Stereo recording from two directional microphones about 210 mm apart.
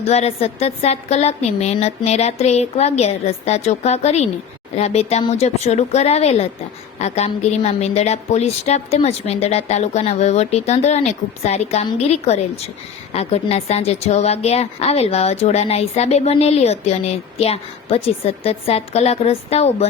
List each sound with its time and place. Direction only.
0.0 s a woman's voice: 30° left (ahead or behind)